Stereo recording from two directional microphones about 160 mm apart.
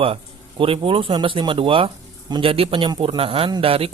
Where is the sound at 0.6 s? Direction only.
35° right (ahead or behind).